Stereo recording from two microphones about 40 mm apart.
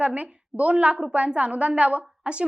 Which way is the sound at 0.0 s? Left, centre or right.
Right.